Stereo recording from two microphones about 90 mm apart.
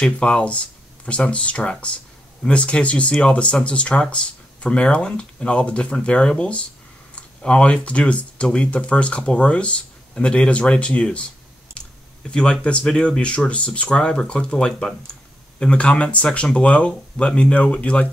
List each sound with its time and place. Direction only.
0.0 s speech: 10° left (ahead or behind)
12.3 s speech: 10° left (ahead or behind)